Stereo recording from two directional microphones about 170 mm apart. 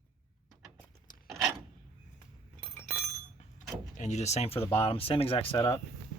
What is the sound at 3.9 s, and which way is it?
Speech, 45° left (ahead or behind).